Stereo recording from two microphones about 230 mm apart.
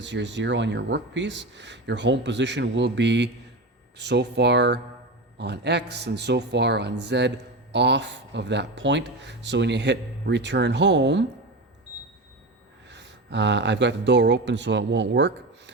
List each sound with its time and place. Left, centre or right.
0.0 s a man's voice: right
12.9 s speech: right